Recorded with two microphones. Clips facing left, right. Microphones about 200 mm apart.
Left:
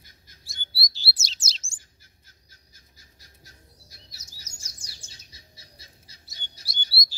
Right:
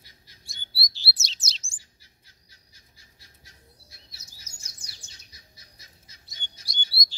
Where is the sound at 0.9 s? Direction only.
Centre (ahead or behind).